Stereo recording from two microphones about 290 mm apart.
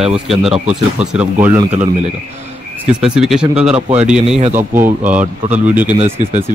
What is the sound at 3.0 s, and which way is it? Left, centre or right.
Speech, centre.